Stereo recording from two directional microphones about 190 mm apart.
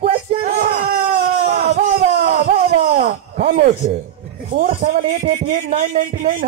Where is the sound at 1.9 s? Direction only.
55° right (ahead or behind).